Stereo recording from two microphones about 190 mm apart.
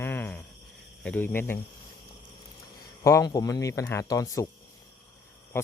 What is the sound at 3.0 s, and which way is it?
Speech, 15° left (ahead or behind).